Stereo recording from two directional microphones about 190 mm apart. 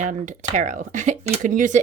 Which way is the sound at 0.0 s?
40° right (ahead or behind).